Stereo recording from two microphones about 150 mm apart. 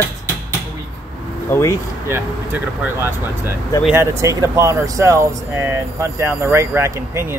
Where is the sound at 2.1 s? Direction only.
15° right (ahead or behind).